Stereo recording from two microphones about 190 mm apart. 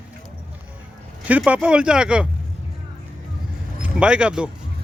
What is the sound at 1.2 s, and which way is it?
Speech, 5° right (ahead or behind).